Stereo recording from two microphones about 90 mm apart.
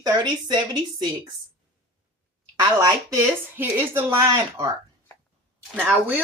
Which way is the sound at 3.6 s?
25° right (ahead or behind).